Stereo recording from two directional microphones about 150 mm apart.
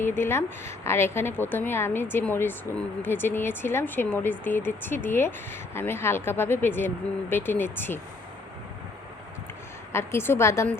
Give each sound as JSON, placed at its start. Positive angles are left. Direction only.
{"t": 0.0, "sound": "a woman's voice", "side_deg": 15}
{"t": 9.9, "sound": "a woman's voice", "side_deg": 15}